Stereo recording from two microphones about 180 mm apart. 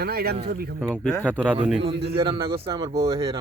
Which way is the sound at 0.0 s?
60° right (ahead or behind).